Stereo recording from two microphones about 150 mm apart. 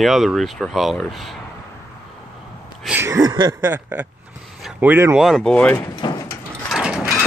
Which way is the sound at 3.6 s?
10° right (ahead or behind).